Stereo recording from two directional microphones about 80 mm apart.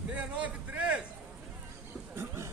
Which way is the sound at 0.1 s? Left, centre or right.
Centre.